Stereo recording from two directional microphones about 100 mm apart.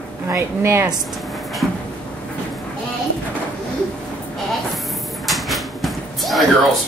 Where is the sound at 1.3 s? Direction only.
Centre (ahead or behind).